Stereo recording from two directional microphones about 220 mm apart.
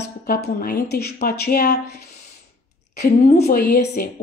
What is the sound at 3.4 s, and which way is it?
Speech, 45° left (ahead or behind).